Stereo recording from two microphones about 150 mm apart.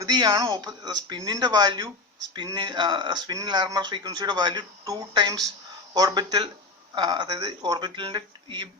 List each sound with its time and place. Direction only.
0.0 s speech: 25° right (ahead or behind)